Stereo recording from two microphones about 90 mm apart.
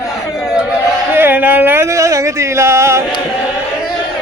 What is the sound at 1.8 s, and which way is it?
Speech, 35° right (ahead or behind).